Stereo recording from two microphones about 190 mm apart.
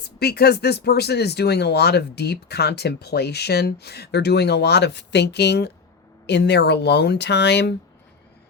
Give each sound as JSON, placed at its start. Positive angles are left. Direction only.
{"t": 0.0, "sound": "speech", "side_deg": 55}